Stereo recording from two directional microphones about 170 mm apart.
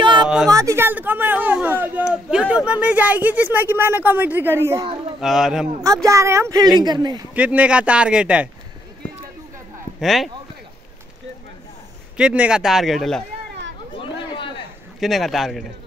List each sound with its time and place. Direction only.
0.0 s a sound: 25° right (ahead or behind)
0.5 s speech: 20° right (ahead or behind)
5.2 s speech: centre (ahead or behind)
6.0 s speech: 15° right (ahead or behind)
7.3 s speech: 10° right (ahead or behind)
9.9 s speech: centre (ahead or behind)
12.2 s speech: 5° right (ahead or behind)
13.9 s chatter: 30° left (ahead or behind)
15.0 s speech: centre (ahead or behind)